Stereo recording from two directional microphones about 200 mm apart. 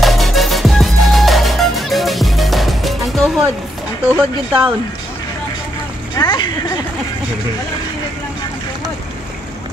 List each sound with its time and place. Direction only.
0.0 s music: centre (ahead or behind)
4.1 s speech: 5° right (ahead or behind)
6.1 s speech: 25° left (ahead or behind)